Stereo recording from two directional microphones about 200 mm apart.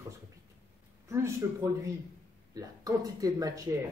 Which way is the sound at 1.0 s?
15° right (ahead or behind).